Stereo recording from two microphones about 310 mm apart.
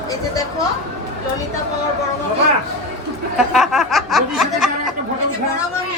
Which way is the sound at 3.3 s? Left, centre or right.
Centre.